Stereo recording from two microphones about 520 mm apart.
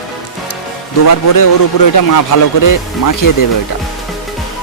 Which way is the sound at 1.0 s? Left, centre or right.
Left.